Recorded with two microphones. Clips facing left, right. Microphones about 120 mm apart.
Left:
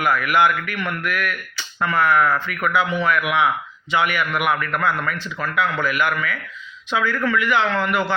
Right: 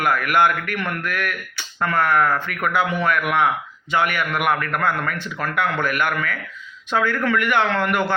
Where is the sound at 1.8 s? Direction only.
50° right (ahead or behind).